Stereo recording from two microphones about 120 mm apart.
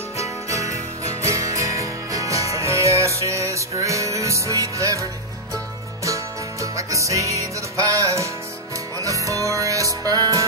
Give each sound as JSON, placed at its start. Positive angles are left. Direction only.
{"t": 0.2, "sound": "jingle bell", "side_deg": -25}
{"t": 1.2, "sound": "music", "side_deg": -25}
{"t": 6.0, "sound": "music", "side_deg": -25}